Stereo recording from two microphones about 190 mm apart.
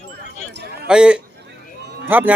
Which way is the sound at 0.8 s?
5° right (ahead or behind).